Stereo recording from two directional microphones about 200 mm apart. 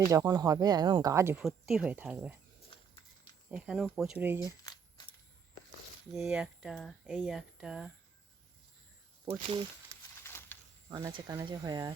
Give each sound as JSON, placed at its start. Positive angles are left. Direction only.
{"t": 0.1, "sound": "speech", "side_deg": -20}
{"t": 1.5, "sound": "speech", "side_deg": 0}
{"t": 3.5, "sound": "speech", "side_deg": -5}
{"t": 4.6, "sound": "a sound", "side_deg": 20}
{"t": 6.1, "sound": "speech", "side_deg": -5}
{"t": 9.2, "sound": "speech", "side_deg": -25}
{"t": 10.2, "sound": "a sound", "side_deg": 10}
{"t": 10.8, "sound": "speech", "side_deg": -20}